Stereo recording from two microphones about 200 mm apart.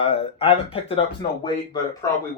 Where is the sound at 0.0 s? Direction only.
25° left (ahead or behind).